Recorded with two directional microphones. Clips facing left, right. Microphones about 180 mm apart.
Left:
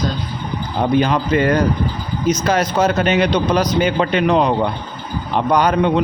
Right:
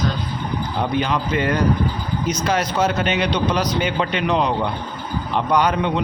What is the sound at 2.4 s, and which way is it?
A man's voice, 40° left (ahead or behind).